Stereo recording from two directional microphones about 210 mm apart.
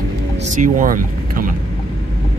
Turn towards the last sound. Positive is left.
turn(degrees=-40)  # may be behind; listen again after turning